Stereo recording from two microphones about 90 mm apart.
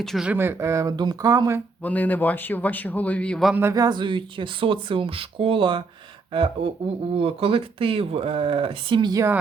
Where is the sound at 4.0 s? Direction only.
65° right (ahead or behind).